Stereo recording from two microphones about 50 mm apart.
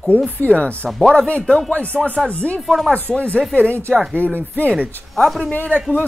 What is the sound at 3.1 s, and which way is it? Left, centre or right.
Speech, left.